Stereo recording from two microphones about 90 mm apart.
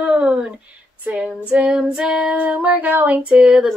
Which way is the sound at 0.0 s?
10° right (ahead or behind).